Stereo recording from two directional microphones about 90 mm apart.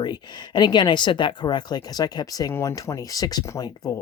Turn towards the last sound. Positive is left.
turn(degrees=40)  # may be behind; listen again after turning